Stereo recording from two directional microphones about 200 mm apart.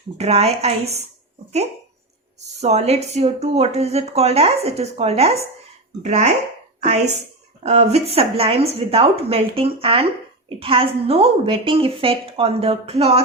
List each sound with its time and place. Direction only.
0.2 s speech: 30° right (ahead or behind)
2.6 s a woman's voice: 35° right (ahead or behind)